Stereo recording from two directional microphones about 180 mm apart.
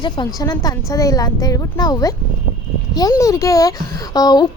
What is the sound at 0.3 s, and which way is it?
A child's voice, 20° left (ahead or behind).